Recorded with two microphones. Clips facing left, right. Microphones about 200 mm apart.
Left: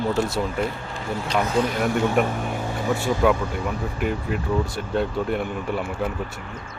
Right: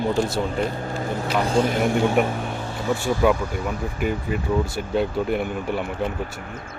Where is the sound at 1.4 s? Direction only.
30° right (ahead or behind).